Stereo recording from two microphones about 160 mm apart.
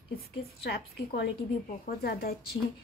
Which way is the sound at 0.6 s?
85° left.